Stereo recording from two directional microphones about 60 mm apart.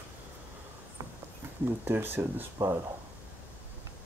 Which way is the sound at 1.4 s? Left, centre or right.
Right.